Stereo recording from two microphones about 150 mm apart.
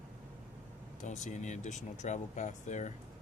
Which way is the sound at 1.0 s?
50° left (ahead or behind).